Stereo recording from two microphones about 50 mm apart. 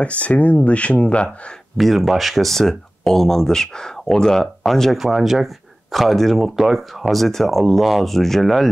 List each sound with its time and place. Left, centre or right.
0.0 s speech: left
1.8 s speech: centre
4.9 s speech: centre